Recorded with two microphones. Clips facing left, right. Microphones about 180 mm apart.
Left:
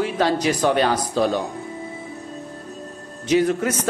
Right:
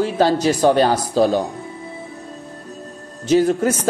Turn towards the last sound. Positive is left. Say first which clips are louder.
# right 3 dB
turn(degrees=-35)  # may be behind; listen again after turning